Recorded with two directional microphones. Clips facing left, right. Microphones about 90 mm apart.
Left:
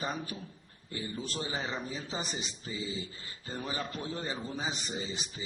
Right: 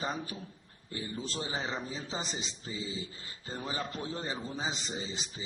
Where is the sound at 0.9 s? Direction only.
30° right (ahead or behind).